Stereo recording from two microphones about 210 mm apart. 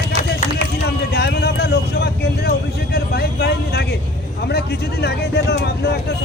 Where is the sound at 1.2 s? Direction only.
50° left (ahead or behind).